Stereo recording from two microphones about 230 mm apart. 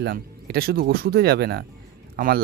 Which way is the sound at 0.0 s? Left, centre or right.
Right.